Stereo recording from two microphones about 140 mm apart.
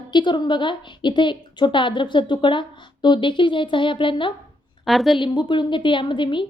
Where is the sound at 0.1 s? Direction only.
35° left (ahead or behind).